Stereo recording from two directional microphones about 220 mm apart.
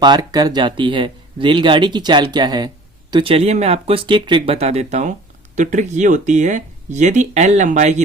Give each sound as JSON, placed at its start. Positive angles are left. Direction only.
{"t": 0.0, "sound": "speech", "side_deg": -20}